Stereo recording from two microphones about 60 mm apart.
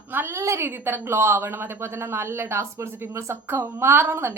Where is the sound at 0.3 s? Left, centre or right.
Right.